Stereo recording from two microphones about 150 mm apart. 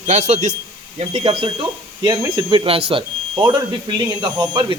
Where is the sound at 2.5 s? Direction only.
35° right (ahead or behind).